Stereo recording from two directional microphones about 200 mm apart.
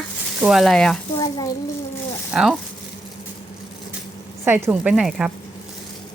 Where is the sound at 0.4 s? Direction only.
Centre (ahead or behind).